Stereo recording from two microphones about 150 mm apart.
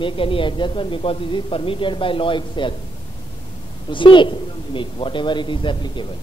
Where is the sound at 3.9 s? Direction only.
35° left (ahead or behind).